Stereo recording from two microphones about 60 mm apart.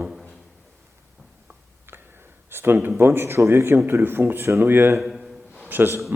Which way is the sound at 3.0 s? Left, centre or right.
Right.